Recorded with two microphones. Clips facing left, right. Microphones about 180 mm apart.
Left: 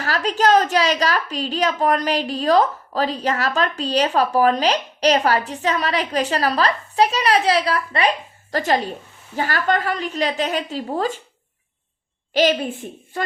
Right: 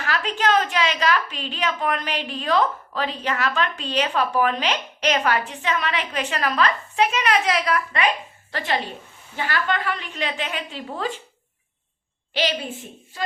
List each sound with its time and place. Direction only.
0.0 s a woman's voice: 40° left (ahead or behind)
12.3 s a woman's voice: 45° left (ahead or behind)
13.1 s speech: 60° left (ahead or behind)